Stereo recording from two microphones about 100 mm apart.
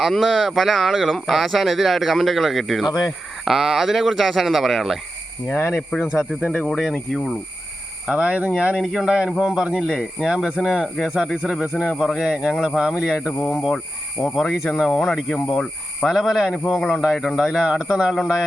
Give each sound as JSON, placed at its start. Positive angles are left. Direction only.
{"t": 0.0, "sound": "speech", "side_deg": 0}
{"t": 5.5, "sound": "speech", "side_deg": 30}
{"t": 5.9, "sound": "speech", "side_deg": 15}
{"t": 6.7, "sound": "speech", "side_deg": 0}
{"t": 8.0, "sound": "speech", "side_deg": -10}
{"t": 16.0, "sound": "speech", "side_deg": -5}